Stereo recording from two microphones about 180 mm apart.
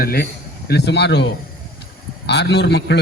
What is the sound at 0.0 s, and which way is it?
Speech, 55° left (ahead or behind).